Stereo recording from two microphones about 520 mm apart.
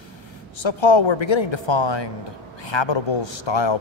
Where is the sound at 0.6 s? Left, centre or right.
Left.